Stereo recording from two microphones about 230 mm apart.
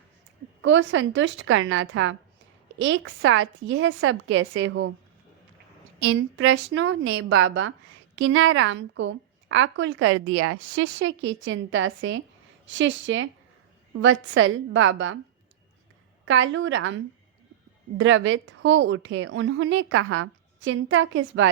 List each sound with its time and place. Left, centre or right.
0.6 s a woman's voice: right
6.1 s a woman's voice: right
16.2 s a woman's voice: right